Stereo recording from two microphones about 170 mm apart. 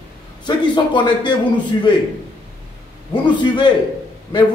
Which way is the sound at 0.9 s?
25° left (ahead or behind).